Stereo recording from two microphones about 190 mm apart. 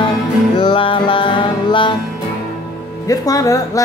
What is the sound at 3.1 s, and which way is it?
Speech, 15° left (ahead or behind).